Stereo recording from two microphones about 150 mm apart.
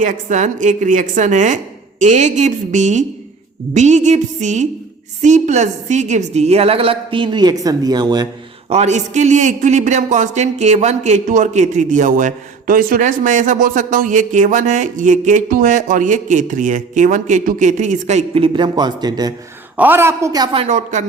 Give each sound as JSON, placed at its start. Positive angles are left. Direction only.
{"t": 0.0, "sound": "a man's voice", "side_deg": -55}
{"t": 8.7, "sound": "a man's voice", "side_deg": -50}
{"t": 19.7, "sound": "a woman's voice", "side_deg": -10}
{"t": 20.7, "sound": "a woman's voice", "side_deg": -55}